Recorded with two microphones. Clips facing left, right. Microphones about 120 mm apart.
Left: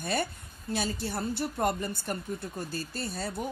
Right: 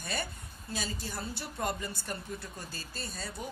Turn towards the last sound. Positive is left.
turn(degrees=55)  # may be behind; listen again after turning